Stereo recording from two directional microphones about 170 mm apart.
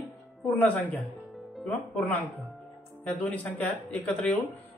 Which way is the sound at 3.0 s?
10° left (ahead or behind).